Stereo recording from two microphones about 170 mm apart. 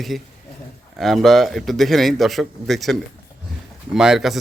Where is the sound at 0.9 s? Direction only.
Centre (ahead or behind).